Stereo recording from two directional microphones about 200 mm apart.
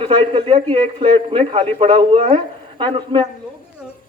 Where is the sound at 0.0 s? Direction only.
25° right (ahead or behind).